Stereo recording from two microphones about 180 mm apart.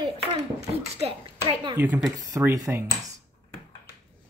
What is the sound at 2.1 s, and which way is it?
Speech, 20° right (ahead or behind).